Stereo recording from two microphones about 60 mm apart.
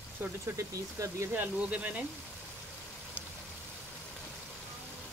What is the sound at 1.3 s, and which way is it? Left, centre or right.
Speech, right.